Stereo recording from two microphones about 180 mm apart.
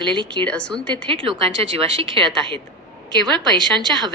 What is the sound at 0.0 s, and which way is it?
Speech, 25° right (ahead or behind).